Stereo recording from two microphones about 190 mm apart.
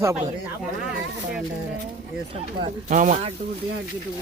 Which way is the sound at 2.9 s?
40° right (ahead or behind).